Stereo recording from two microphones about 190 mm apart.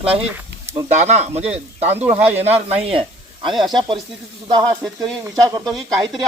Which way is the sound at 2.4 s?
35° right (ahead or behind).